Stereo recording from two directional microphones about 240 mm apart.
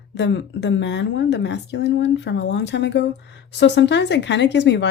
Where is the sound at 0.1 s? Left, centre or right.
Left.